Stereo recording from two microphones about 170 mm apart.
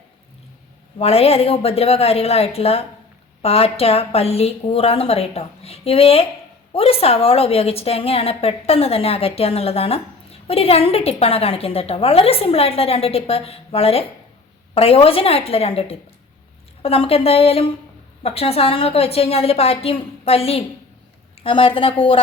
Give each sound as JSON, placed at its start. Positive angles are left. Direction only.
{"t": 0.9, "sound": "speech", "side_deg": 35}